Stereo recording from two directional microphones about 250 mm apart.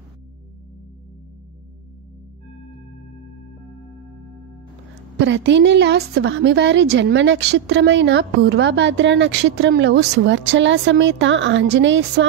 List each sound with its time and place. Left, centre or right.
5.2 s a woman's voice: right